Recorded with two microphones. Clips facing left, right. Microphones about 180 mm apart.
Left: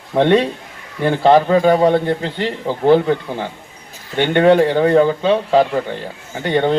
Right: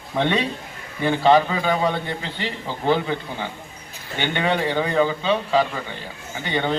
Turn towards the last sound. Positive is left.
turn(degrees=55)  # may be behind; listen again after turning